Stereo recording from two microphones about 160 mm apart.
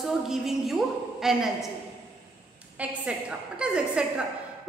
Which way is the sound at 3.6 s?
5° right (ahead or behind).